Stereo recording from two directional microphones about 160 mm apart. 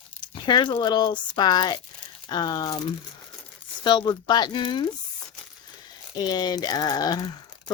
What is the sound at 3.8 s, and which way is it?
Speech, 30° left (ahead or behind).